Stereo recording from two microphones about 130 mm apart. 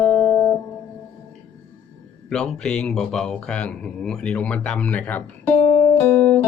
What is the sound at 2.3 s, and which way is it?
A man's voice, 5° left (ahead or behind).